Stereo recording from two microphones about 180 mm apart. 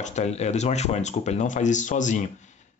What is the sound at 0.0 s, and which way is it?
Speech, 40° left (ahead or behind).